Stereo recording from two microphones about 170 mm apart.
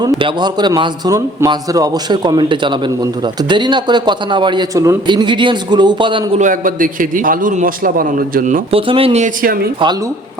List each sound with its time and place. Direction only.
0.2 s a man's voice: 25° right (ahead or behind)
6.4 s a man's voice: 50° right (ahead or behind)
8.7 s speech: 35° right (ahead or behind)